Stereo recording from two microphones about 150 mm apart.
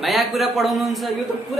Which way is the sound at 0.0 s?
Centre (ahead or behind).